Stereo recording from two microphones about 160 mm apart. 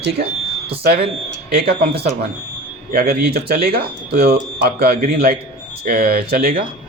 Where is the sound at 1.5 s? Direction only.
75° right (ahead or behind).